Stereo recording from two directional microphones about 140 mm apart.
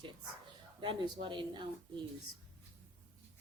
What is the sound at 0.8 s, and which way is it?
A woman's voice, 35° right (ahead or behind).